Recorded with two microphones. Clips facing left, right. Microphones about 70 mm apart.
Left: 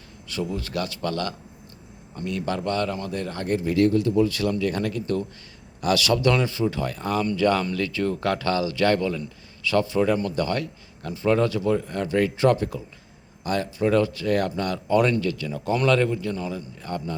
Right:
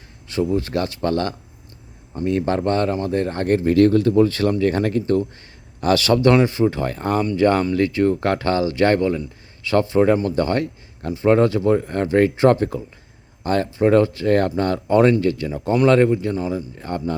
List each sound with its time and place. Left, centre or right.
0.3 s speech: right
3.4 s speech: right
16.3 s speech: centre
16.7 s speech: right